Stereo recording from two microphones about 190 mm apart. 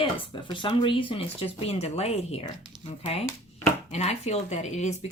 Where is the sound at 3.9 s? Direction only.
35° left (ahead or behind).